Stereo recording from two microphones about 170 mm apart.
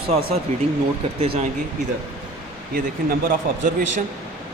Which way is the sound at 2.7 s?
55° right (ahead or behind).